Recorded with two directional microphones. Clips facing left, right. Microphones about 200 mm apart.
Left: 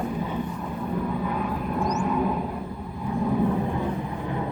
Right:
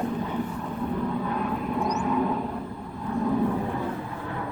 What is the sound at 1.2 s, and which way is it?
Vehicle, 5° left (ahead or behind).